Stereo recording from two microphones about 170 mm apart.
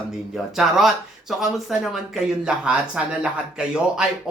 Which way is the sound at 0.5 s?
Centre (ahead or behind).